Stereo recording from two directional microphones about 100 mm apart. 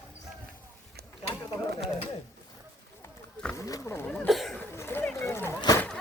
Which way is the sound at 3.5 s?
30° left (ahead or behind).